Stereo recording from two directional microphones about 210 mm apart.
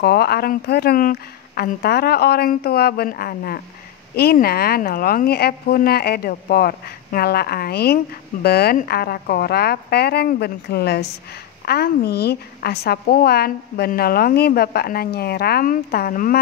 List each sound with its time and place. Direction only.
0.0 s speech: 50° left (ahead or behind)